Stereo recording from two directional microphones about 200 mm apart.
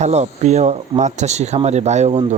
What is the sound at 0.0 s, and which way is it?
Speech, 35° right (ahead or behind).